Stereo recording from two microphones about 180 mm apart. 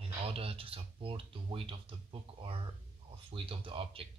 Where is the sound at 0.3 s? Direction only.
30° right (ahead or behind).